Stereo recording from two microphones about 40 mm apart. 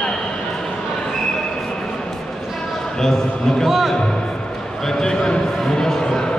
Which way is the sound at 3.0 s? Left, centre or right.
Centre.